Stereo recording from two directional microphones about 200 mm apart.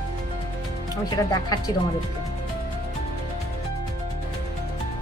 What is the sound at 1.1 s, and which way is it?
Speech, 20° left (ahead or behind).